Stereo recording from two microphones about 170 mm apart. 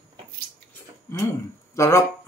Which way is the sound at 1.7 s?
15° left (ahead or behind).